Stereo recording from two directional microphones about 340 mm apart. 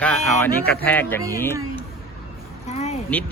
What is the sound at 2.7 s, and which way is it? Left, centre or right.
Vehicle, centre.